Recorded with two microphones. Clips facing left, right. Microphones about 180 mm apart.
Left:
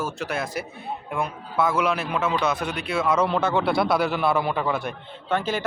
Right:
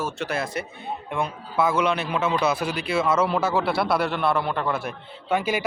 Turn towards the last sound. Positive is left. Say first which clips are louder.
# right 1 dB
turn(degrees=-10)  # may be behind; listen again after turning